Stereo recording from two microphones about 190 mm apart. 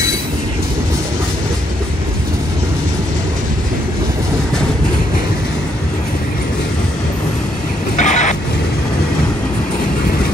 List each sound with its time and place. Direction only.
7.9 s vehicle: 40° left (ahead or behind)